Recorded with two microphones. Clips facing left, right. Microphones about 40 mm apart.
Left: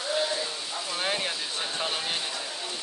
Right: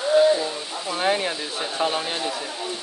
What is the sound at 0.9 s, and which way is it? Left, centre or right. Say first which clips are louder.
Speech: right 7 dB; centre.